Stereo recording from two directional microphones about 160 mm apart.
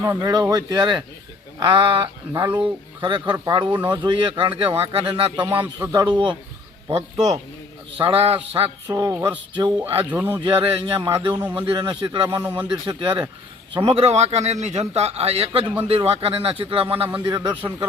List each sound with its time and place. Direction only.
0.0 s a man's voice: 15° right (ahead or behind); by 5.5 s 35° right (ahead or behind)
5.5 s speech: 15° right (ahead or behind)
7.9 s a man's voice: 35° right (ahead or behind)
9.7 s speech: 10° right (ahead or behind)
10.3 s a man's voice: 30° right (ahead or behind)
12.3 s speech: 10° right (ahead or behind)
12.8 s a man's voice: 30° right (ahead or behind)